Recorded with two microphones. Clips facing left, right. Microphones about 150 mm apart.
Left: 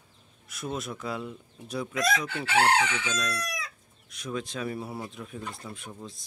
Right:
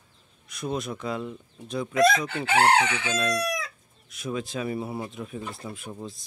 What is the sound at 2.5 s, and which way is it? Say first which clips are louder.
Chicken: right 3 dB; 55° right (ahead or behind).